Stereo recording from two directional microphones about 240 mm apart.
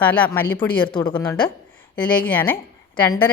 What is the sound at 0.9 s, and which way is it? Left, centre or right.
Speech, centre.